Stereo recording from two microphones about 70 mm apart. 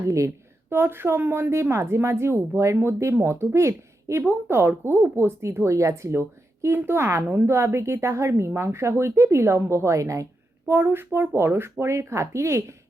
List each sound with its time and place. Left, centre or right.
0.7 s a woman's voice: right
10.7 s a woman's voice: right